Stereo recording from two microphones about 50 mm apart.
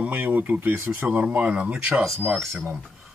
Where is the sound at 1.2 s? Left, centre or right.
Right.